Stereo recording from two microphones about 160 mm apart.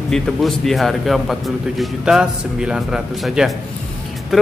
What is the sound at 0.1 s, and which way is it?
Speech, centre (ahead or behind).